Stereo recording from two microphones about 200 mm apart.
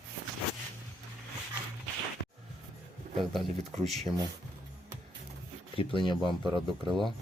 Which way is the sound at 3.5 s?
35° right (ahead or behind).